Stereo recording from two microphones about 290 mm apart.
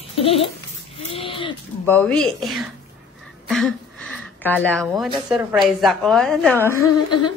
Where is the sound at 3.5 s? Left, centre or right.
Centre.